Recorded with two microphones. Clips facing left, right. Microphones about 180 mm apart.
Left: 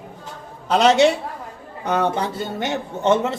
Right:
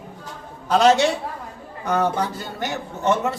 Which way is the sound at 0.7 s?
20° left (ahead or behind).